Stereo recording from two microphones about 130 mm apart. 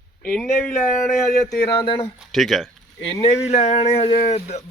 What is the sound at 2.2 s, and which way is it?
Speech, centre (ahead or behind).